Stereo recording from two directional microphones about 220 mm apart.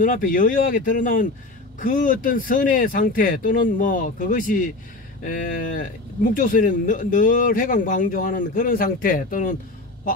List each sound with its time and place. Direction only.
0.0 s speech: 35° left (ahead or behind)